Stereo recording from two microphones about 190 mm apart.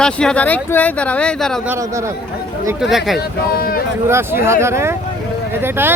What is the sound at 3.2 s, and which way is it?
Speech, 55° left (ahead or behind).